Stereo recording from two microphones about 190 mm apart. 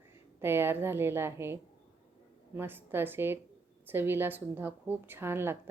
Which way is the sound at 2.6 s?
10° right (ahead or behind).